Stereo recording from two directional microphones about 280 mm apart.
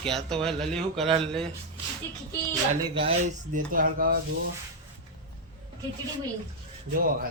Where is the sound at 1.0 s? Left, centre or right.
Centre.